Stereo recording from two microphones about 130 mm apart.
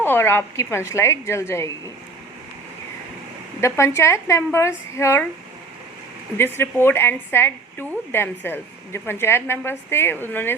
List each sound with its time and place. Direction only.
0.0 s a woman's voice: 15° left (ahead or behind)
3.6 s a woman's voice: 20° left (ahead or behind)
6.3 s a woman's voice: 20° left (ahead or behind)